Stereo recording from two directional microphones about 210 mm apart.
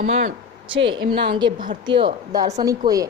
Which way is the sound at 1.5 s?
40° right (ahead or behind).